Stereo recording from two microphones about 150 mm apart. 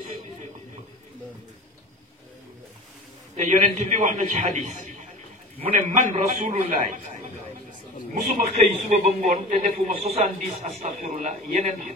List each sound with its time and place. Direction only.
3.3 s a man's voice: 55° right (ahead or behind)